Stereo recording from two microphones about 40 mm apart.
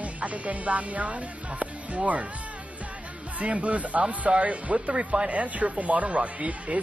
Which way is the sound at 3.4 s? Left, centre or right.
Right.